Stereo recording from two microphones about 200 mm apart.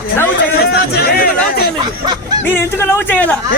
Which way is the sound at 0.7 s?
50° left (ahead or behind).